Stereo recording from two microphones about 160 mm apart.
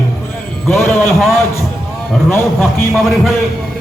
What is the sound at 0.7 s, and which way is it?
Music, 15° left (ahead or behind).